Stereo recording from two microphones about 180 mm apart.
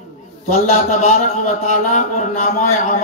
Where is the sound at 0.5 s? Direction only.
40° left (ahead or behind).